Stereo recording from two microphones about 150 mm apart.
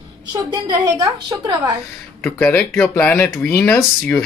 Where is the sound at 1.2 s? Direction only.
30° right (ahead or behind).